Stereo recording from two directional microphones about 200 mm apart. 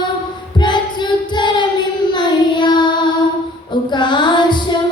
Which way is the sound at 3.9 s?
20° left (ahead or behind).